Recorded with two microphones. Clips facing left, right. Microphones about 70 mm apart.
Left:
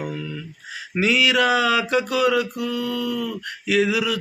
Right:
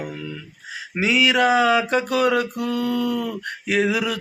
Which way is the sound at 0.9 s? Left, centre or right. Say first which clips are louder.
Even; right.